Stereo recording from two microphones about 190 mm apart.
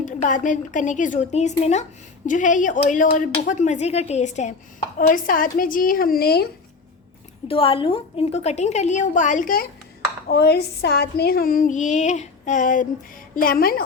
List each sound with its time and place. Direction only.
0.0 s speech: 40° left (ahead or behind)
4.9 s female singing: 45° left (ahead or behind)
7.4 s speech: 30° left (ahead or behind); by 9.6 s 45° left (ahead or behind)
10.2 s female singing: 60° left (ahead or behind)